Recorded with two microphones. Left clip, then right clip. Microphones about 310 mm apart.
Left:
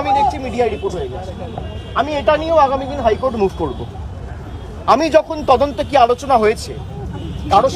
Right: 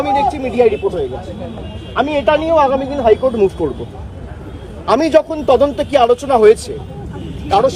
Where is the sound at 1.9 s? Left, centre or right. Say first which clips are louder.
Right 2 dB; centre.